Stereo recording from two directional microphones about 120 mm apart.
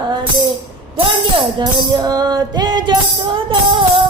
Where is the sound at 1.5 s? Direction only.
35° right (ahead or behind).